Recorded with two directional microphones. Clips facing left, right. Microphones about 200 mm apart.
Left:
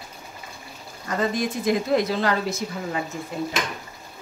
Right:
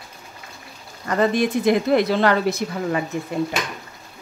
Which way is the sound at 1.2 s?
65° right (ahead or behind).